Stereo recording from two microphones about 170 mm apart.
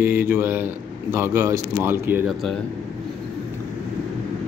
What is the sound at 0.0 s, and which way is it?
Speech, 15° right (ahead or behind).